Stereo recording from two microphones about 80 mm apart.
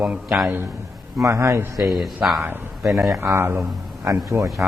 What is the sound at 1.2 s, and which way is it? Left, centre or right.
Speech, right.